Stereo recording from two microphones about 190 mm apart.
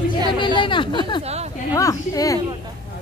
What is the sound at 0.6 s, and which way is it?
A woman's voice, 25° left (ahead or behind).